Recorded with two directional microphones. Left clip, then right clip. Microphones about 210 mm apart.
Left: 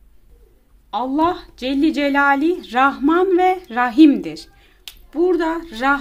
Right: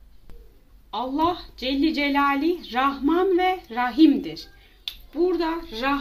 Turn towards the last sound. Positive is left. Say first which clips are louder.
# left 7 dB
turn(degrees=50)  # may be behind; listen again after turning